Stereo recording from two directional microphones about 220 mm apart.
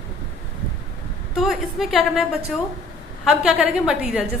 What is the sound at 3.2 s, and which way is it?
A woman's voice, 5° right (ahead or behind).